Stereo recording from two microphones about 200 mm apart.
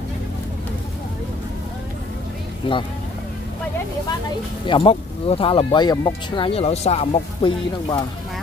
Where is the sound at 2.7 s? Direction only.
25° left (ahead or behind).